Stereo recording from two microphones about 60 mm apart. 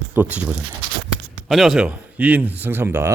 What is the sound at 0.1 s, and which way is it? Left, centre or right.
Speech, right.